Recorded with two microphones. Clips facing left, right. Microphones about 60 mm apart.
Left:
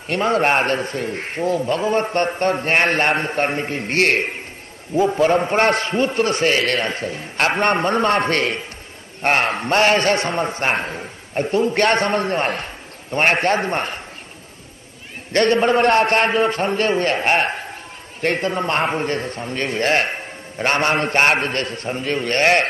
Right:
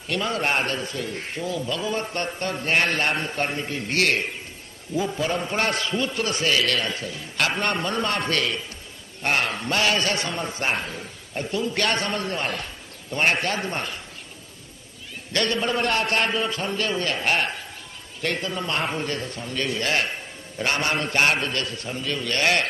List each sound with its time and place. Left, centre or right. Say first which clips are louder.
0.1 s a man's voice: left 7 dB; left
15.3 s a man's voice: left 8 dB; left